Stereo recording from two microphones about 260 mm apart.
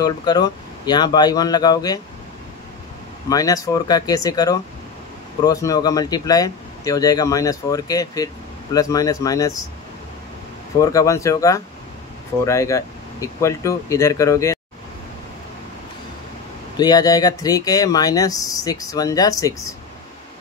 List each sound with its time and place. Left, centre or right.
0.0 s speech: centre
3.3 s speech: centre
10.8 s speech: centre
16.7 s speech: centre